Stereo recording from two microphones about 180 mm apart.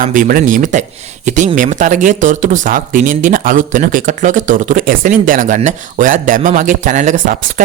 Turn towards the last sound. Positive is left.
turn(degrees=-45)  # may be behind; listen again after turning